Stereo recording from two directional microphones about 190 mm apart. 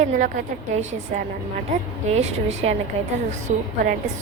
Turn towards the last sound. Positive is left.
turn(degrees=-40)  # may be behind; listen again after turning